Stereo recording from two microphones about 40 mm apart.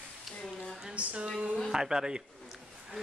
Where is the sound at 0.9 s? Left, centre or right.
Right.